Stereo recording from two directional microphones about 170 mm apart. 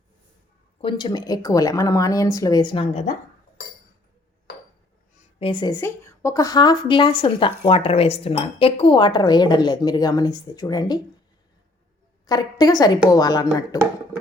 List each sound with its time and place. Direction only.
0.8 s speech: 30° left (ahead or behind)
2.7 s a woman's voice: 40° left (ahead or behind)
5.4 s speech: 30° left (ahead or behind)
5.8 s speech: 15° left (ahead or behind)
12.2 s speech: 25° left (ahead or behind)